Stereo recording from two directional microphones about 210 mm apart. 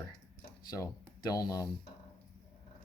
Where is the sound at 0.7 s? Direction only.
15° left (ahead or behind).